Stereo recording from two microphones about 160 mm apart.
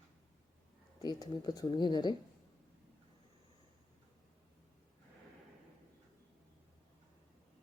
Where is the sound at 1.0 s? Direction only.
25° left (ahead or behind).